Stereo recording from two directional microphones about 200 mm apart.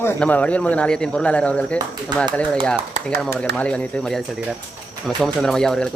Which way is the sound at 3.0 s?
35° right (ahead or behind).